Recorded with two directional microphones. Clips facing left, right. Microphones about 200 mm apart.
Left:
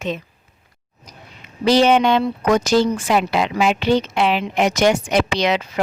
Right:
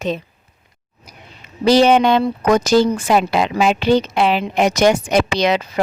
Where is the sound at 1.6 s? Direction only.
35° right (ahead or behind).